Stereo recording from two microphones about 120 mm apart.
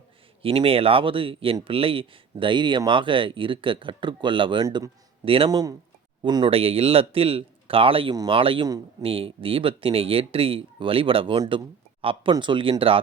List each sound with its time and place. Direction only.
0.4 s speech: 50° right (ahead or behind)
4.6 s speech: 30° right (ahead or behind)
5.2 s speech: 50° right (ahead or behind)
5.5 s speech: 35° right (ahead or behind)